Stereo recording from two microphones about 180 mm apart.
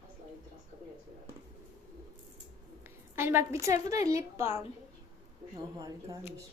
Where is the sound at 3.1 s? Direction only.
15° right (ahead or behind).